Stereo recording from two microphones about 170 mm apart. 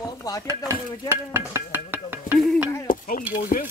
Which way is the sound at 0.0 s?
20° left (ahead or behind).